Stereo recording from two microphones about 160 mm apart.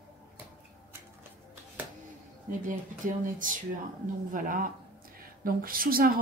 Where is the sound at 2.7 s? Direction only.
55° right (ahead or behind).